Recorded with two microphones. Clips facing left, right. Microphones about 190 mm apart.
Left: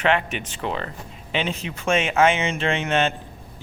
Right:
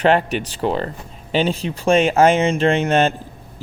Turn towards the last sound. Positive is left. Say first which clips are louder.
# right 6 dB
turn(degrees=-40)  # may be behind; listen again after turning